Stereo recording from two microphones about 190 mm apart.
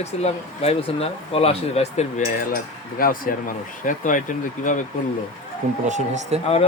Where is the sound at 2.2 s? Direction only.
50° left (ahead or behind).